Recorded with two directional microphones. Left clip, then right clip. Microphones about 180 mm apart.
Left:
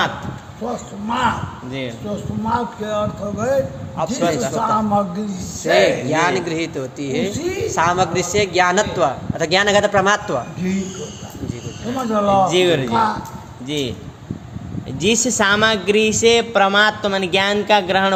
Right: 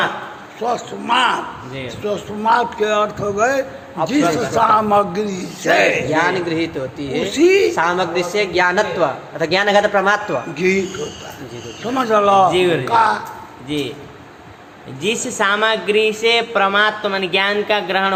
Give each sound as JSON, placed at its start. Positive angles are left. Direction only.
{"t": 0.6, "sound": "speech", "side_deg": -50}
{"t": 4.0, "sound": "a man's voice", "side_deg": 25}
{"t": 4.5, "sound": "speech", "side_deg": -50}
{"t": 5.8, "sound": "a man's voice", "side_deg": 25}
{"t": 7.3, "sound": "speech", "side_deg": -55}
{"t": 7.8, "sound": "a man's voice", "side_deg": 25}
{"t": 11.9, "sound": "speech", "side_deg": -50}
{"t": 12.5, "sound": "a man's voice", "side_deg": 60}
{"t": 12.9, "sound": "speech", "side_deg": -50}
{"t": 13.7, "sound": "a man's voice", "side_deg": 55}
{"t": 15.0, "sound": "a woman's voice", "side_deg": 65}